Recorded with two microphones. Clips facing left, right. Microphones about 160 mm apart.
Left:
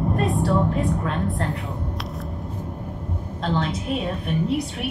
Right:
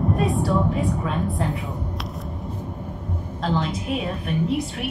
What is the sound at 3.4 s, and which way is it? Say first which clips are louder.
A woman's voice: even; 5° right (ahead or behind).